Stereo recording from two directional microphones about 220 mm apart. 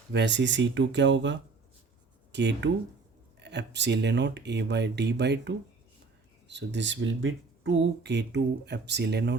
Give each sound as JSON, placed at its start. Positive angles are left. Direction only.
{"t": 0.1, "sound": "speech", "side_deg": -50}